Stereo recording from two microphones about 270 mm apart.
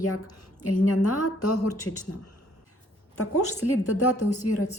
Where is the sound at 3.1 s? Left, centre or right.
Left.